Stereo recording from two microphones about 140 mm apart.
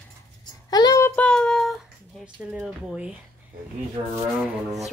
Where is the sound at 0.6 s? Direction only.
30° left (ahead or behind).